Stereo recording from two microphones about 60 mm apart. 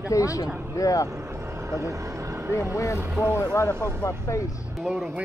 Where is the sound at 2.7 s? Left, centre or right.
Left.